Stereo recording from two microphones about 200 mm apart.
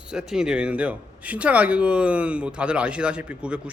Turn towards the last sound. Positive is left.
turn(degrees=-5)  # may be behind; listen again after turning